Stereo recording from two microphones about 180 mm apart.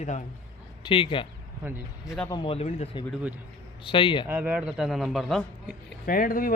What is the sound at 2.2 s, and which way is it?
Speech, 25° left (ahead or behind).